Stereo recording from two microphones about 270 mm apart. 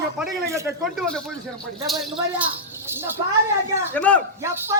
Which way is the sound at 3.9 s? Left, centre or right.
Centre.